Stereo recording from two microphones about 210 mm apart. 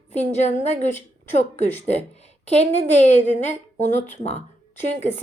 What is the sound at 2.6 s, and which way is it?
Speech, 35° left (ahead or behind).